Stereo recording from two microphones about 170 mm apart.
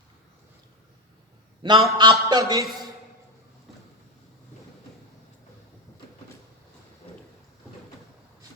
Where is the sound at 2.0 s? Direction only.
25° right (ahead or behind).